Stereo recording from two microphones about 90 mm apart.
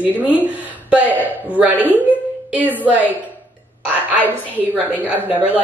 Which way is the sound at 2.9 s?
20° right (ahead or behind).